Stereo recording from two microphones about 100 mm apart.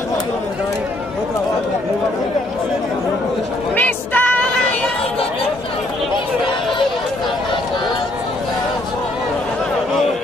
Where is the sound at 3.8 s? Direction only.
15° left (ahead or behind).